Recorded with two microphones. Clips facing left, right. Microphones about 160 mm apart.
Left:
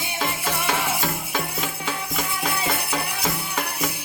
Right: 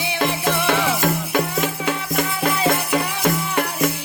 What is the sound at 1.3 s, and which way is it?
Music, 65° right (ahead or behind).